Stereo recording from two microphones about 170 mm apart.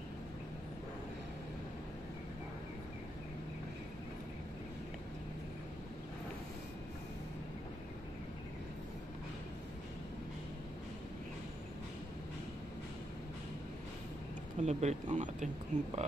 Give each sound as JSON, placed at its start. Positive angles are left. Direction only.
{"t": 14.6, "sound": "speech", "side_deg": -40}